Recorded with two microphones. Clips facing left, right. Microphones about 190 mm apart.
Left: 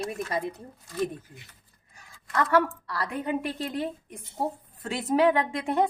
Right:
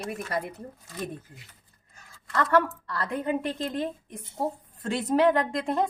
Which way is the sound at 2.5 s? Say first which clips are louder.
Even; 5° left (ahead or behind).